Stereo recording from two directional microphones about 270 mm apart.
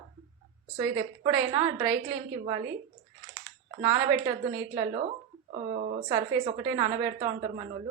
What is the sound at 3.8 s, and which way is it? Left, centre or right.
Speech, centre.